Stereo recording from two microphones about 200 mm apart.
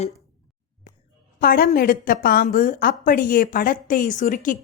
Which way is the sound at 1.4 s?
45° left (ahead or behind).